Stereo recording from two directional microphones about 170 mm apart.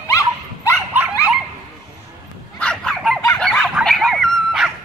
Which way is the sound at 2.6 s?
5° left (ahead or behind).